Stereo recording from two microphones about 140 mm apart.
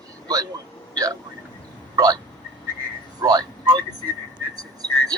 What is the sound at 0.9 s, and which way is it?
Speech, 25° right (ahead or behind).